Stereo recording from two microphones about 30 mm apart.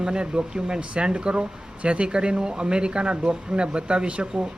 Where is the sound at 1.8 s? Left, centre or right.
Right.